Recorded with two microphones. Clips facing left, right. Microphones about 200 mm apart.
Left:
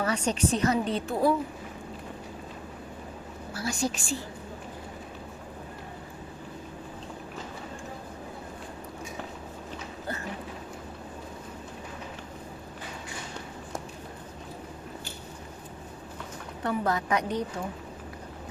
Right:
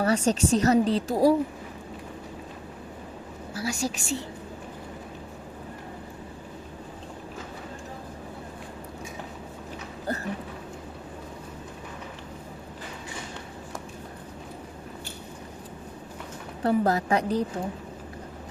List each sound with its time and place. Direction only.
0.0 s a woman's voice: 35° right (ahead or behind)
3.5 s a woman's voice: 10° right (ahead or behind)
10.1 s a sound: 40° right (ahead or behind)
16.6 s a woman's voice: 35° right (ahead or behind)